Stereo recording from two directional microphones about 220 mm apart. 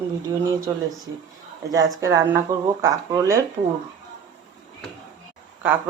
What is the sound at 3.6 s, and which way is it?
Speech, 30° right (ahead or behind).